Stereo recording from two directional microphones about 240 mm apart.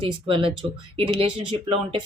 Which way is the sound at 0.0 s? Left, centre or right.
Right.